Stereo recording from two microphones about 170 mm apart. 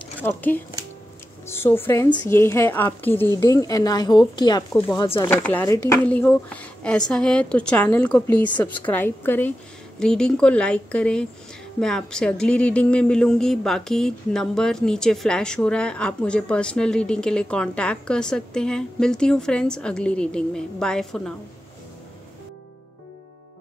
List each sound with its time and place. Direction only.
0.0 s a woman's voice: 10° left (ahead or behind)
5.1 s a woman's voice: 15° left (ahead or behind)